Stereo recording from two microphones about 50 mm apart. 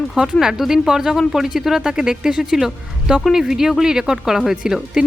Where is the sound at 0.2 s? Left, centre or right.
Centre.